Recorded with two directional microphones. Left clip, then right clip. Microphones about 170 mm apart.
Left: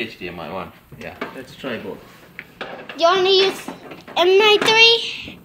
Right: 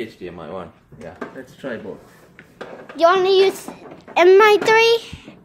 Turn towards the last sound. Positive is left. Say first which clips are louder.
# left 1 dB
turn(degrees=-35)  # may be behind; listen again after turning